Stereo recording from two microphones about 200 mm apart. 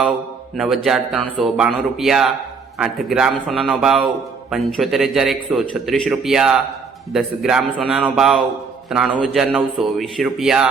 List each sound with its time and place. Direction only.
0.5 s a man's voice: centre (ahead or behind)